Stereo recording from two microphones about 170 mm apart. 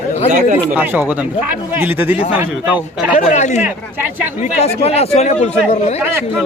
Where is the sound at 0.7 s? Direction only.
10° right (ahead or behind).